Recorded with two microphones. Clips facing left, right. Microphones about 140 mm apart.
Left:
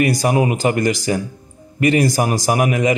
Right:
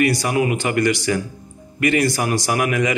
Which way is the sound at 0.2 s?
35° left (ahead or behind).